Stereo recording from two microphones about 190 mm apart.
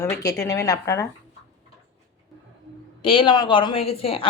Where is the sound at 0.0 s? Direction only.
15° left (ahead or behind).